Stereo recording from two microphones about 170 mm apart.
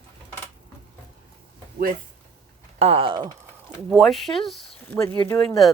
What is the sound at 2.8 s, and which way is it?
Speech, 35° right (ahead or behind).